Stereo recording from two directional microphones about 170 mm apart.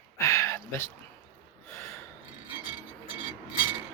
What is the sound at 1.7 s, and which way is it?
Gasp, 15° left (ahead or behind).